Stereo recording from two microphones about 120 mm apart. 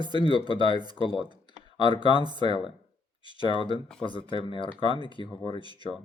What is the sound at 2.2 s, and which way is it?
Speech, 40° right (ahead or behind).